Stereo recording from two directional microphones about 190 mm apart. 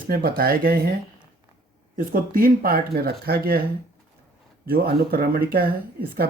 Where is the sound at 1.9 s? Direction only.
50° right (ahead or behind).